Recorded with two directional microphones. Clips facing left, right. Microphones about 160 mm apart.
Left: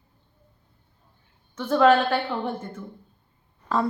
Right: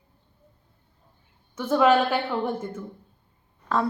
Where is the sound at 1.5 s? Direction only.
10° right (ahead or behind).